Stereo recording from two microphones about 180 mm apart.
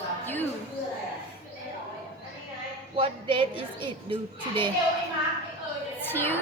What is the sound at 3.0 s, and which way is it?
A child's voice, 30° right (ahead or behind).